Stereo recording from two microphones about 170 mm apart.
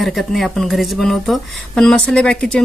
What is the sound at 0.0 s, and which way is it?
Speech, centre (ahead or behind).